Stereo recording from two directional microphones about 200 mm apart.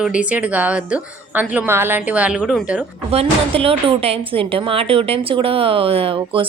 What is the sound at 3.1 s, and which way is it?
A woman's voice, 30° right (ahead or behind).